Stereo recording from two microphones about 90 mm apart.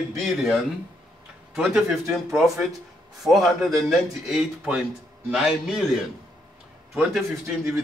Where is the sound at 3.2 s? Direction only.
Centre (ahead or behind).